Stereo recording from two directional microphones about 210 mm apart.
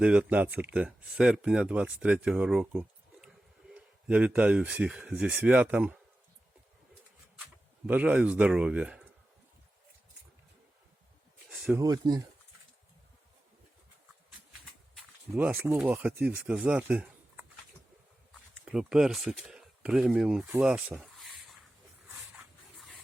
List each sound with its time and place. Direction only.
0.0 s speech: 5° right (ahead or behind)
7.9 s speech: 5° right (ahead or behind)
11.4 s a sound: 5° right (ahead or behind)
11.8 s speech: 20° right (ahead or behind)
14.9 s speech: centre (ahead or behind)
18.5 s speech: 5° right (ahead or behind)